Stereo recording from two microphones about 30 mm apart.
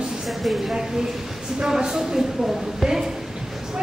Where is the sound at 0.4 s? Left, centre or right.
Centre.